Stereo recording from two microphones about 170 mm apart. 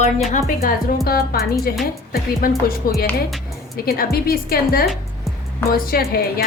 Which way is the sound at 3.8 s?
65° left (ahead or behind).